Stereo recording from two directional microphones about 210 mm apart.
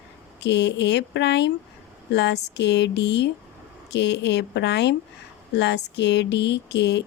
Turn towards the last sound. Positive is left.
turn(degrees=55)  # may be behind; listen again after turning